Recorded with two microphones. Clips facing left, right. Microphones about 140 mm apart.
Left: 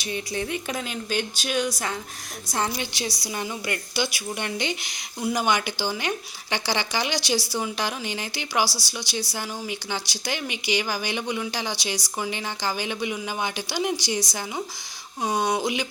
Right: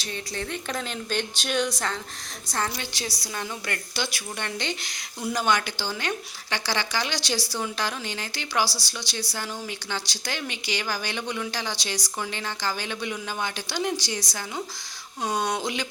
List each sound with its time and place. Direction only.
0.0 s a woman's voice: 15° left (ahead or behind)